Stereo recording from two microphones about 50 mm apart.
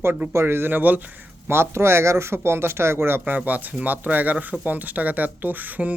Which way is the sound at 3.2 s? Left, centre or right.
Right.